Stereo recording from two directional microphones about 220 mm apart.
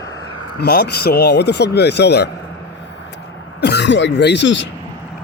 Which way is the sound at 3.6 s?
50° left (ahead or behind).